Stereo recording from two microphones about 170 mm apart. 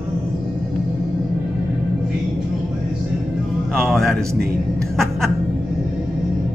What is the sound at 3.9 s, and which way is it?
Speech, centre (ahead or behind).